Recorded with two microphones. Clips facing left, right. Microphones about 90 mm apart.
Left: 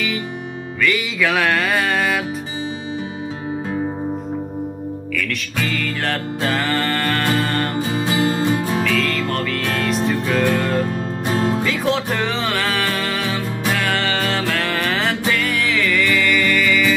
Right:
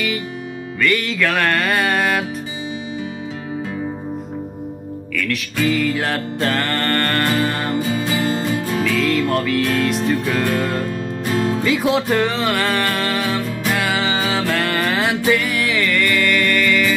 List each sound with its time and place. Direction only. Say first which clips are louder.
0.7 s music: right 1 dB; centre (ahead or behind)
5.1 s music: right 3 dB; centre (ahead or behind)
5.6 s music: right 5 dB; 10° right (ahead or behind)
6.4 s music: even; 5° left (ahead or behind)
7.7 s music: even; 20° left (ahead or behind)
8.8 s music: right 2 dB; 5° right (ahead or behind)
10.9 s music: even; 30° left (ahead or behind)
11.6 s music: right 2 dB; 5° right (ahead or behind)